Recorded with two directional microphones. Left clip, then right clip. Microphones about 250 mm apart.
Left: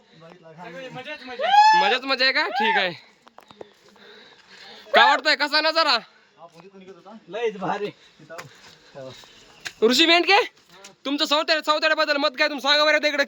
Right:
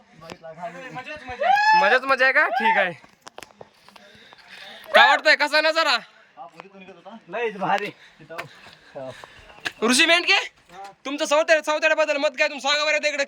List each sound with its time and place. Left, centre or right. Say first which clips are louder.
1.2 s speech: left 3 dB; centre
4.7 s speech: right 1 dB; centre
7.3 s speech: right 2 dB; right
9.8 s speech: left 1 dB; centre
10.2 s speech: left 2 dB; centre